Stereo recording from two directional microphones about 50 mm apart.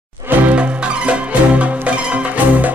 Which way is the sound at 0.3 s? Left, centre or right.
Right.